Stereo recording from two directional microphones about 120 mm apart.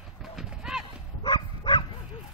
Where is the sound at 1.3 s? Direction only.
40° left (ahead or behind).